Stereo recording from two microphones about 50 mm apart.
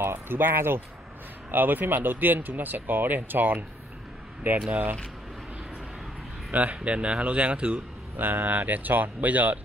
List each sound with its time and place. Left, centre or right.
0.0 s speech: right
4.4 s speech: right
6.5 s speech: right
8.2 s speech: right